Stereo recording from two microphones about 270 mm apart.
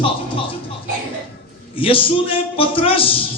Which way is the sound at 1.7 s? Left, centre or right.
Centre.